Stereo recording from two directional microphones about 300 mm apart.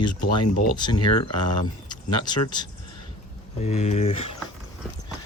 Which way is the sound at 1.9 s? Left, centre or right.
Centre.